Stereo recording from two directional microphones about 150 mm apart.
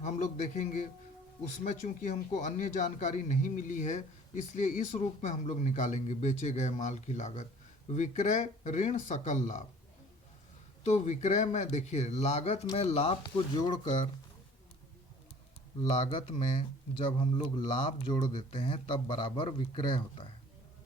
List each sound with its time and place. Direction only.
0.0 s speech: 55° left (ahead or behind)
10.8 s speech: 50° left (ahead or behind); by 13.8 s 25° left (ahead or behind)
16.0 s speech: 35° left (ahead or behind)